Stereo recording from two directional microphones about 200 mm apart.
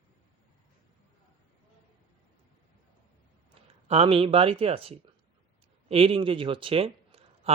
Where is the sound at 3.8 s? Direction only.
30° right (ahead or behind).